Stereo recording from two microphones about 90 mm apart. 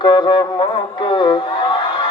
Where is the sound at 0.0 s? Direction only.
60° left (ahead or behind).